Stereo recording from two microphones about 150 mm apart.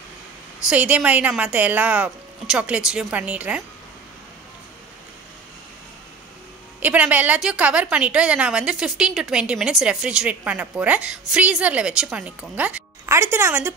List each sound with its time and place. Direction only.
0.7 s a woman's voice: 10° right (ahead or behind)
6.8 s a woman's voice: 10° right (ahead or behind)